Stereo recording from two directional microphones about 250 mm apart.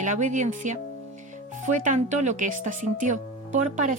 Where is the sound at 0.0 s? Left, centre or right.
Right.